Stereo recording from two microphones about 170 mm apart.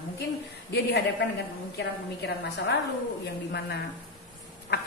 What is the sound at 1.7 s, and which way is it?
A woman's voice, 90° left.